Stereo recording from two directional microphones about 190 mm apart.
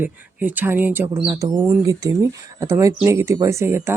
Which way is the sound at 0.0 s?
10° right (ahead or behind).